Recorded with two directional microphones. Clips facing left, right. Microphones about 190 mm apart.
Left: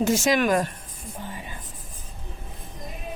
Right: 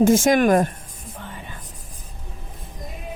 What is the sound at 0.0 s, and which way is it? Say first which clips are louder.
Speech: right 6 dB; 50° right (ahead or behind).